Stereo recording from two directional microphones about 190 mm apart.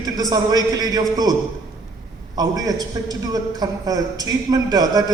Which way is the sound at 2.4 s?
20° right (ahead or behind).